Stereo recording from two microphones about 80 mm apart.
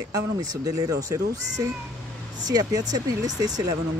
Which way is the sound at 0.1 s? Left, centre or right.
Right.